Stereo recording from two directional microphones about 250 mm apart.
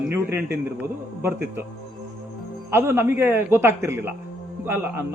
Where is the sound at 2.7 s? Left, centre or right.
Centre.